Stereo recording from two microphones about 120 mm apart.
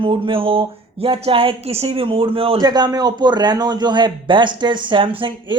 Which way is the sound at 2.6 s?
35° right (ahead or behind).